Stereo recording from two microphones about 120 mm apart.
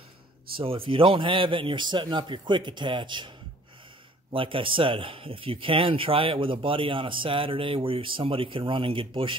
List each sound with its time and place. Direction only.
0.6 s speech: 50° right (ahead or behind)